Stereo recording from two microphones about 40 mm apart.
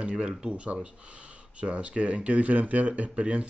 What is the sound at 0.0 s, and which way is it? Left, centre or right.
Speech, right.